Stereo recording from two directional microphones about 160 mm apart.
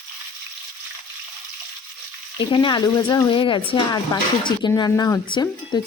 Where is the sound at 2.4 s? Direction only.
30° left (ahead or behind).